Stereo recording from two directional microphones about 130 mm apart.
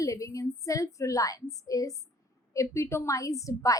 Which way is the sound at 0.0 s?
25° left (ahead or behind).